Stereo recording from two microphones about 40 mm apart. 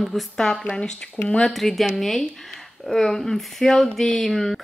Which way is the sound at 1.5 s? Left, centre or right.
Centre.